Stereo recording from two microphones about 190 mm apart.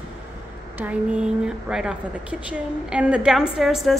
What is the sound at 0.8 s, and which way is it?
A woman's voice, 5° right (ahead or behind).